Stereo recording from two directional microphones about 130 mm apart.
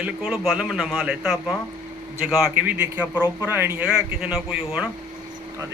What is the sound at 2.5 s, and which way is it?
A man's voice, 10° right (ahead or behind).